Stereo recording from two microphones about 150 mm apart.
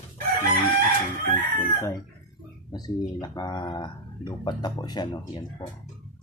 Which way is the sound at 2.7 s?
25° left (ahead or behind).